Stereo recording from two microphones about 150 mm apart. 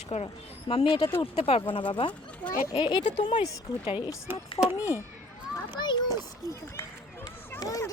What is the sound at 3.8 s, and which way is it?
Speech, 35° left (ahead or behind).